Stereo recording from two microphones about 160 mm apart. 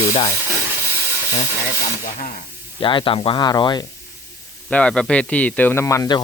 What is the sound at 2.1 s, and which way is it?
Speech, 50° left (ahead or behind).